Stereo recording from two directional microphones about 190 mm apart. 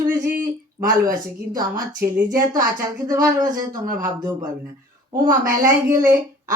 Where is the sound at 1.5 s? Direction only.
15° right (ahead or behind).